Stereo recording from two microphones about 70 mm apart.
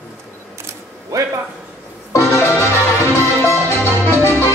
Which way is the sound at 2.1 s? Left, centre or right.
Left.